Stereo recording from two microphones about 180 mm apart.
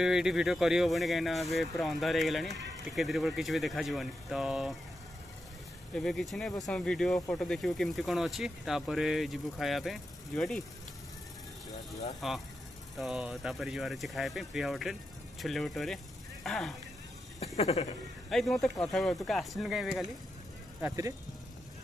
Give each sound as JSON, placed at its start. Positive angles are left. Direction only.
{"t": 0.0, "sound": "speech", "side_deg": -5}
{"t": 5.9, "sound": "speech", "side_deg": 0}
{"t": 12.2, "sound": "speech", "side_deg": 0}
{"t": 17.6, "sound": "speech", "side_deg": 35}
{"t": 18.3, "sound": "speech", "side_deg": 0}